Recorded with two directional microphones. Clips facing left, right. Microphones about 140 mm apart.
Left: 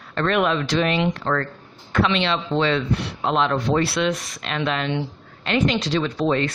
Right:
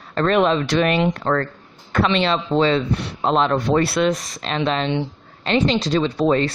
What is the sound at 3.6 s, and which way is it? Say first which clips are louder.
Speech: right 3 dB; 50° right (ahead or behind).